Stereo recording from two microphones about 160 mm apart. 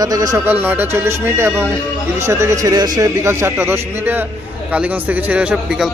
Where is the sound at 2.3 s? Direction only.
20° right (ahead or behind).